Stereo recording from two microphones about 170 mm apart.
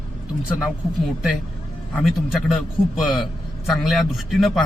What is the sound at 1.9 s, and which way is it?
A man's voice, centre (ahead or behind).